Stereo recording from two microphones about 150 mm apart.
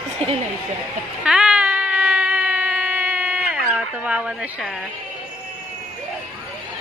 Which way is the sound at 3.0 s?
10° right (ahead or behind).